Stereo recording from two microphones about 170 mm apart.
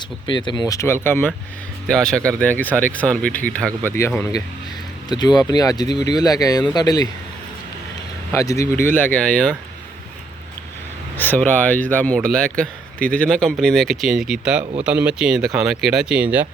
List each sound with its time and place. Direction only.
0.3 s speech: 25° left (ahead or behind)
5.0 s speech: 25° left (ahead or behind)
8.3 s speech: 20° left (ahead or behind)
11.2 s speech: 10° left (ahead or behind); by 16.5 s 10° right (ahead or behind)